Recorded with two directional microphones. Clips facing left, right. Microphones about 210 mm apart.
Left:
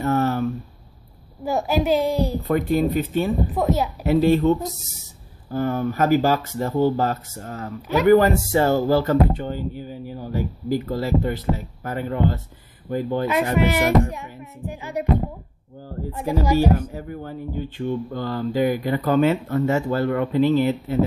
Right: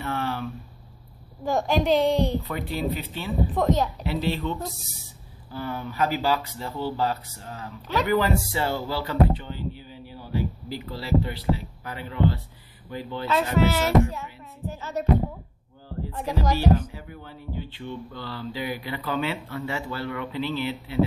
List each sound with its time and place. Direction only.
0.0 s a sound: 45° left (ahead or behind)
1.4 s a woman's voice: 5° left (ahead or behind)
2.4 s speech: 50° left (ahead or behind)
3.5 s music: 10° left (ahead or behind)
4.0 s speech: 45° left (ahead or behind)
13.6 s music: 15° left (ahead or behind)
16.1 s music: 10° left (ahead or behind)
16.9 s speech: 45° left (ahead or behind)